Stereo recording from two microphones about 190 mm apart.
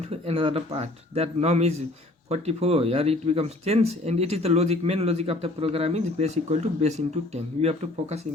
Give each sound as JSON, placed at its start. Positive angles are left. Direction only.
{"t": 0.1, "sound": "speech", "side_deg": -30}